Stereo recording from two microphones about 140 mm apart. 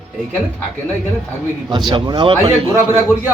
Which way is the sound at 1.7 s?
30° right (ahead or behind).